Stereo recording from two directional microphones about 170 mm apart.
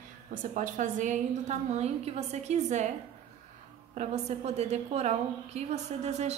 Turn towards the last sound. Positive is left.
turn(degrees=-40)  # may be behind; listen again after turning